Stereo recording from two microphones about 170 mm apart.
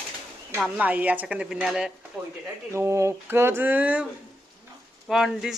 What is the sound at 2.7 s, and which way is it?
A woman's voice, 15° right (ahead or behind).